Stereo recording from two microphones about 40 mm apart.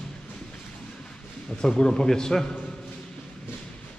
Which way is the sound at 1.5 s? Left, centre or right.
Left.